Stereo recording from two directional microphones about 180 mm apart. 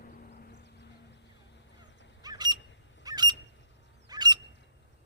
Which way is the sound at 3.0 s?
25° right (ahead or behind).